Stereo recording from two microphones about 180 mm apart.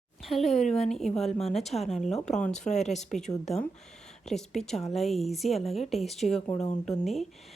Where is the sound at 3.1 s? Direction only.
5° left (ahead or behind).